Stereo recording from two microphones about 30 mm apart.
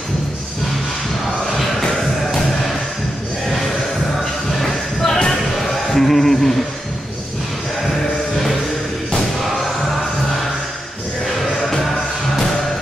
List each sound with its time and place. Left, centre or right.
1.8 s music: centre
3.4 s a sound: centre
4.6 s music: centre
5.9 s speech: centre
9.4 s music: centre
11.6 s music: centre